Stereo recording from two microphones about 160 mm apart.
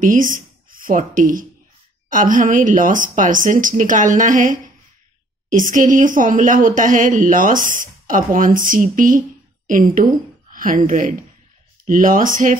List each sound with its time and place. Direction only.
0.0 s a woman's voice: 55° right (ahead or behind)